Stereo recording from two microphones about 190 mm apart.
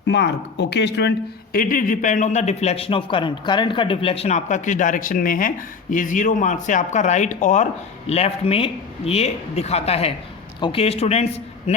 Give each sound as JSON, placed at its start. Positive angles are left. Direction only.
{"t": 0.1, "sound": "speech", "side_deg": 65}
{"t": 1.5, "sound": "speech", "side_deg": 45}